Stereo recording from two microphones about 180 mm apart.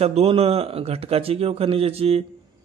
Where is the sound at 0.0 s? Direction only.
35° right (ahead or behind).